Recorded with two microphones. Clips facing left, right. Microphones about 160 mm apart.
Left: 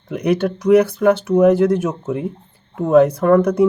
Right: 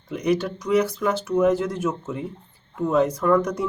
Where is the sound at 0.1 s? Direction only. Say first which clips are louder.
Left 5 dB; 60° left (ahead or behind).